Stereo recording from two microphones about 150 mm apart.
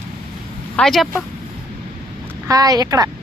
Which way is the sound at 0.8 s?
Centre (ahead or behind).